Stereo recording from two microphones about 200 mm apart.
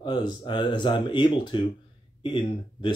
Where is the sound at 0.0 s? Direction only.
20° left (ahead or behind).